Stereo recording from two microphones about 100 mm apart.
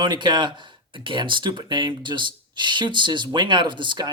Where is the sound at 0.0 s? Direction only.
50° right (ahead or behind).